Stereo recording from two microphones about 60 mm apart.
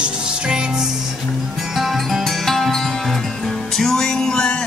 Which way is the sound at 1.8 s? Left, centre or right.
Centre.